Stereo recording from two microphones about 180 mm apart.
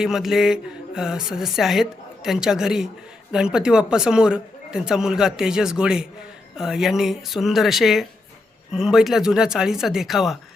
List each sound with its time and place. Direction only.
0.0 s a woman's voice: centre (ahead or behind)